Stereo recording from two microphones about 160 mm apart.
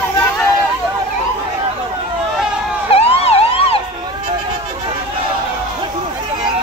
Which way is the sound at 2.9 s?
40° left (ahead or behind).